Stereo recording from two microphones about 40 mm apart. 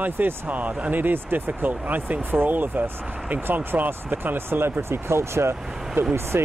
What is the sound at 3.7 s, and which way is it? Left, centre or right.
Speech, right.